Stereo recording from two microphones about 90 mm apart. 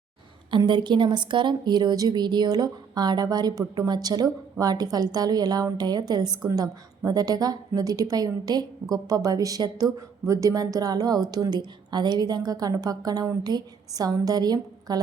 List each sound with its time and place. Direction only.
0.6 s a woman's voice: 60° right (ahead or behind)